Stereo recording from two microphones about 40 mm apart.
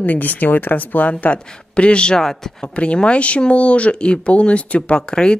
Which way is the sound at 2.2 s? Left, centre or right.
Centre.